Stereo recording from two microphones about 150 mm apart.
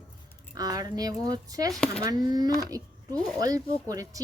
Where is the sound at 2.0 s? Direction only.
25° right (ahead or behind).